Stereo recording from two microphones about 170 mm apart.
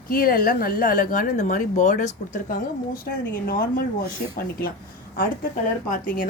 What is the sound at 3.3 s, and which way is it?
Speech, 60° left (ahead or behind).